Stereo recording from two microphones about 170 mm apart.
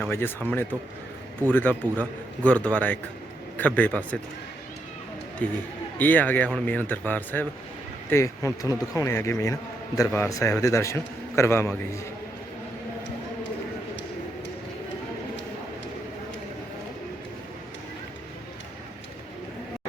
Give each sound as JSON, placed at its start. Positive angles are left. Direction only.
{"t": 0.1, "sound": "a man's voice", "side_deg": 15}
{"t": 5.4, "sound": "a man's voice", "side_deg": 10}